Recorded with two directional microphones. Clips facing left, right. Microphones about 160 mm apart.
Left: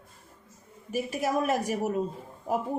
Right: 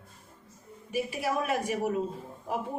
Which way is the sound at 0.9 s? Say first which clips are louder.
Left 2 dB; 45° left (ahead or behind).